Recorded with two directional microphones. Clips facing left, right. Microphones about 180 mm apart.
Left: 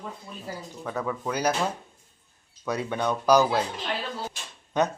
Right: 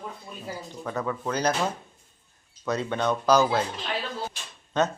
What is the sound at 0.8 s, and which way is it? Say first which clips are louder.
Speech: even; 5° left (ahead or behind).